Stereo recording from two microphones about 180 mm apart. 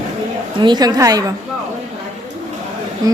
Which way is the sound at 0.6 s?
25° right (ahead or behind).